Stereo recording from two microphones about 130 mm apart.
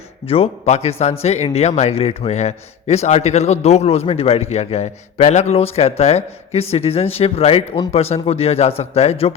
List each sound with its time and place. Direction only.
0.3 s a man's voice: 50° left (ahead or behind)